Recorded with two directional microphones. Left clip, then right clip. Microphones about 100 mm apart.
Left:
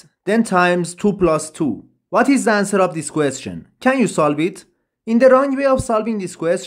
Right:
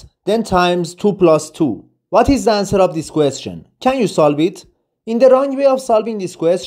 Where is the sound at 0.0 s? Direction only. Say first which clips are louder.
Right 1 dB; 5° right (ahead or behind).